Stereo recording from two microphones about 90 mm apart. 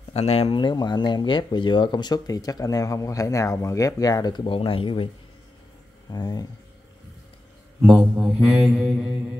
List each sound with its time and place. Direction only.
0.4 s speech: 70° left (ahead or behind); by 4.5 s 50° left (ahead or behind)
4.5 s speech: 90° left
6.0 s a sound: 50° left (ahead or behind)
7.8 s mantra: 5° right (ahead or behind)